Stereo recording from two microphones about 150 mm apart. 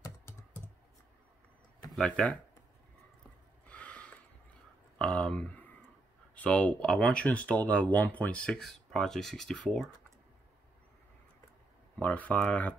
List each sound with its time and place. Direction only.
0.0 s computer keyboard: 20° left (ahead or behind)
1.9 s speech: 5° left (ahead or behind)
3.6 s gasp: 10° left (ahead or behind)
4.9 s a sound: 5° left (ahead or behind)
6.3 s speech: 10° left (ahead or behind)
12.0 s speech: 10° left (ahead or behind)